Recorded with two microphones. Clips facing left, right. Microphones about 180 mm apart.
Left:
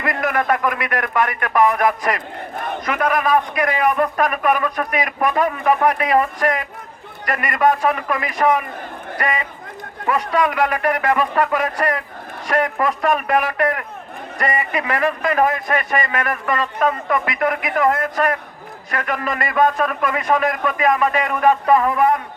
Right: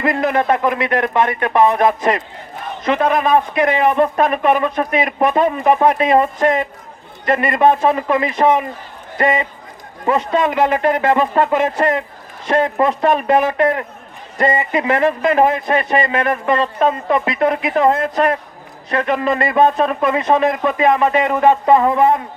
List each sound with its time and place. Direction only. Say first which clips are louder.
0.0 s a man's voice: right 4 dB; 25° right (ahead or behind)